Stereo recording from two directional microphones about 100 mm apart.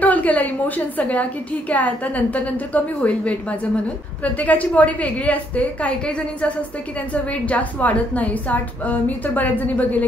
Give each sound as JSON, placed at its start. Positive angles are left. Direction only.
{"t": 0.0, "sound": "a woman's voice", "side_deg": 15}